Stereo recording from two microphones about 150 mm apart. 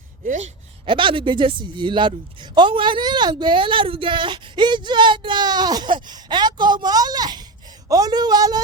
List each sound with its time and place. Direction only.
0.3 s speech: 55° right (ahead or behind)
0.9 s a woman's voice: 35° right (ahead or behind)